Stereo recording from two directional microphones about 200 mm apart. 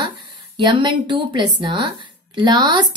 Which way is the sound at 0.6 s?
25° right (ahead or behind).